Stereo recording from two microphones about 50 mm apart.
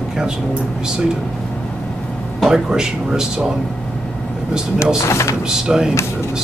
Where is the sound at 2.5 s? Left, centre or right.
Centre.